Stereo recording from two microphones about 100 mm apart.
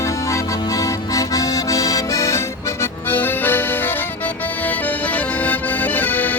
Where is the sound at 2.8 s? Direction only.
20° left (ahead or behind).